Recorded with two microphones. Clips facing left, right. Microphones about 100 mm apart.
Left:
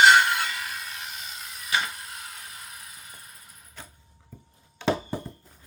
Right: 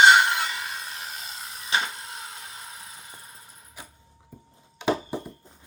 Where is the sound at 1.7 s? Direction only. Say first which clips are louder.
Right 1 dB; 25° right (ahead or behind).